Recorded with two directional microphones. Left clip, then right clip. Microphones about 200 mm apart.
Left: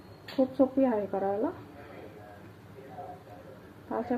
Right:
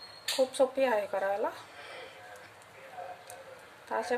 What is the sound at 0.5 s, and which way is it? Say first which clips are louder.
Speech: left 2 dB; 15° right (ahead or behind).